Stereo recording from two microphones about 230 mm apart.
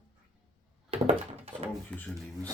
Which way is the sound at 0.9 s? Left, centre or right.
Right.